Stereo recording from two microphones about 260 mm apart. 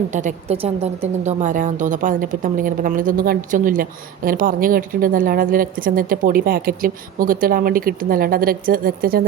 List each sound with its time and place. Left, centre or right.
0.1 s a woman's voice: right